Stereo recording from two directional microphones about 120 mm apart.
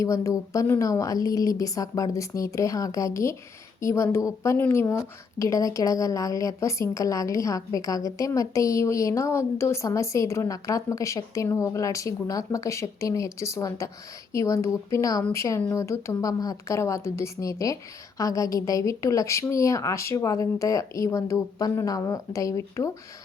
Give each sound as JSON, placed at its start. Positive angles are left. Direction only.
{"t": 0.0, "sound": "a woman's voice", "side_deg": 25}